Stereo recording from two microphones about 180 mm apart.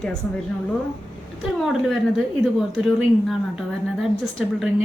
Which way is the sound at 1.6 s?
Centre (ahead or behind).